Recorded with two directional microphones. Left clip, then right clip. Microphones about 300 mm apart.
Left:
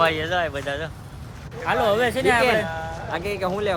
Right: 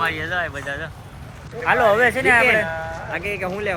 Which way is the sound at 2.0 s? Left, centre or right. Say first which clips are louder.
Right 4 dB; centre.